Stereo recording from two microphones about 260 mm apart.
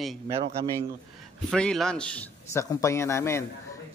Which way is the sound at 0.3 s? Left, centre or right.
Right.